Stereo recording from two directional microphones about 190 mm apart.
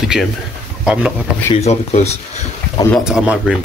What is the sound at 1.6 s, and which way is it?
Speech, 35° left (ahead or behind).